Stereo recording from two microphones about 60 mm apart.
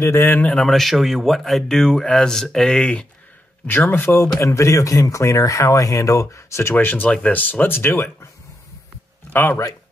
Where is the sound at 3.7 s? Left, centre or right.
Left.